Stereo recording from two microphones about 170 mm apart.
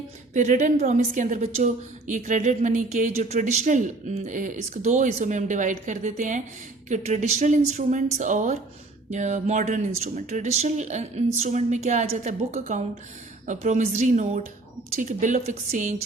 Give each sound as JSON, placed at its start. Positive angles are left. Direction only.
{"t": 0.3, "sound": "a woman's voice", "side_deg": -45}